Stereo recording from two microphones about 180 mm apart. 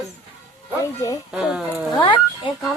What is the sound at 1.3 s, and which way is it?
Speech, 5° right (ahead or behind).